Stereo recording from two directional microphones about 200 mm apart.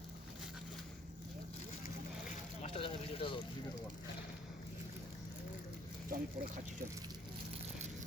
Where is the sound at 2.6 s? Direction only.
30° left (ahead or behind).